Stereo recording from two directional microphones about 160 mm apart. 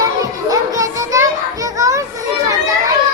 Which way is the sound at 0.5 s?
20° right (ahead or behind).